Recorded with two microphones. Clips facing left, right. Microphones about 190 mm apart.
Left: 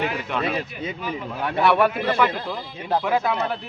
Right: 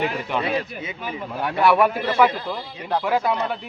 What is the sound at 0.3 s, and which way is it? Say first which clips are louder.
A man's voice: right 1 dB; 15° right (ahead or behind).